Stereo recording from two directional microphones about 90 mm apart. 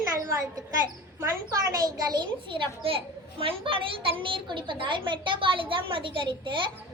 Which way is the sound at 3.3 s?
85° right.